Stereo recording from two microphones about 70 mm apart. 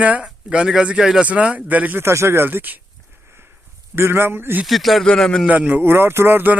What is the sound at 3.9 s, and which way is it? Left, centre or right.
Speech, right.